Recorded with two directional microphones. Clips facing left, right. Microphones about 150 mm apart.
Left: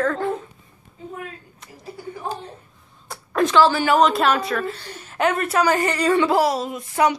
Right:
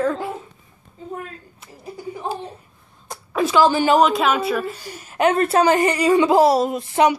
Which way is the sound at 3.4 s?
10° right (ahead or behind).